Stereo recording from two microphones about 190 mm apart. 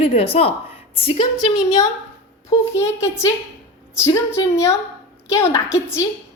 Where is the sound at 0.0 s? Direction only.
30° left (ahead or behind).